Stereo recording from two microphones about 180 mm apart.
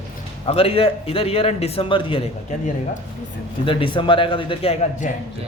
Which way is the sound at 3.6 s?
30° left (ahead or behind).